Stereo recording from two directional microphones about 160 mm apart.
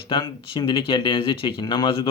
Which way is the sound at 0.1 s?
30° left (ahead or behind).